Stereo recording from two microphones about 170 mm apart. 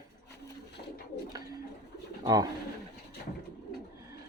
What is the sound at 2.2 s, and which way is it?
Speech, 20° right (ahead or behind).